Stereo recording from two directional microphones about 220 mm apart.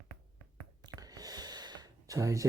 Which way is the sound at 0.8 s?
15° right (ahead or behind).